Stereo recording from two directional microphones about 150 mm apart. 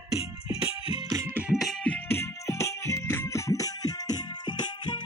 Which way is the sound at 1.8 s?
15° left (ahead or behind).